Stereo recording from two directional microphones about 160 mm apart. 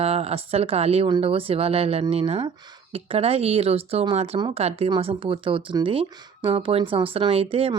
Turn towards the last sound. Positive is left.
turn(degrees=-35)  # may be behind; listen again after turning